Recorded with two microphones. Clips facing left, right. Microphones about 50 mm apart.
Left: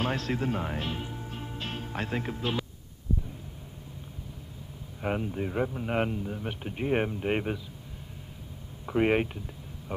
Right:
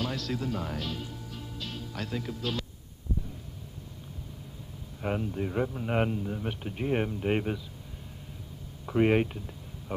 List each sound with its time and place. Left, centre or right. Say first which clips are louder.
0.0 s speech: left 3 dB; left
5.0 s a man's voice: left 1 dB; centre
8.8 s a man's voice: right 1 dB; centre